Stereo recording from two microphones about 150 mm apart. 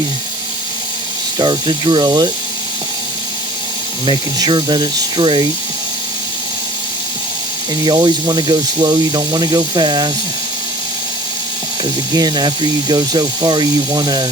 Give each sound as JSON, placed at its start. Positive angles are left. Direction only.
{"t": 1.4, "sound": "speech", "side_deg": -30}
{"t": 4.0, "sound": "speech", "side_deg": -30}
{"t": 7.9, "sound": "speech", "side_deg": -30}
{"t": 12.1, "sound": "speech", "side_deg": -25}